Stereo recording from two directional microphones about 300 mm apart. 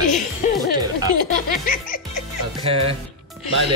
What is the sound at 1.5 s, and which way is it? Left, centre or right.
Music, left.